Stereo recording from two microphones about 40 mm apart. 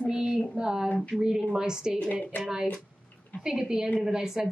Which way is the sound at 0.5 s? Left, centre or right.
Centre.